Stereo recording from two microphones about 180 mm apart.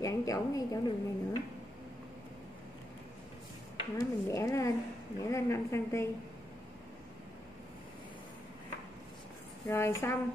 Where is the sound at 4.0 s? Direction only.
15° left (ahead or behind).